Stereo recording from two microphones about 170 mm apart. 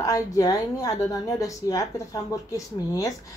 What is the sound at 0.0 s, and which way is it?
Speech, 20° left (ahead or behind).